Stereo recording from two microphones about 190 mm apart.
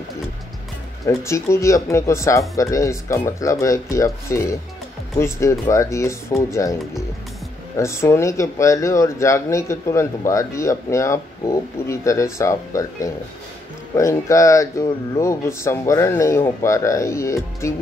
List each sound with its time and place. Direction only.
1.0 s speech: 15° left (ahead or behind)